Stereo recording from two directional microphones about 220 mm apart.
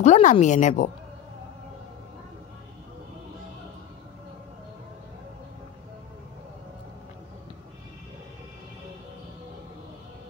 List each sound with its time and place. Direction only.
0.0 s speech: 35° left (ahead or behind)